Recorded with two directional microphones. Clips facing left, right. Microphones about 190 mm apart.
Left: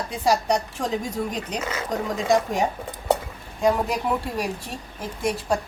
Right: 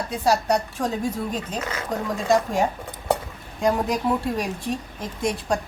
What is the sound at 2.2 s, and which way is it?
Speech, 15° left (ahead or behind).